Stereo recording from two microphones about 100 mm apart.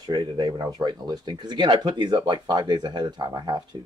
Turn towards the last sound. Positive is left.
turn(degrees=-45)  # may be behind; listen again after turning